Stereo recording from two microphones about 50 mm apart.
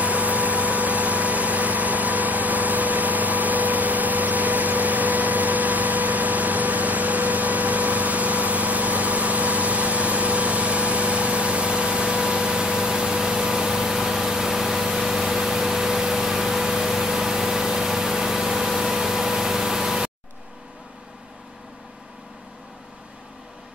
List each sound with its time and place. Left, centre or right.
0.0 s vehicle: right; by 20.1 s centre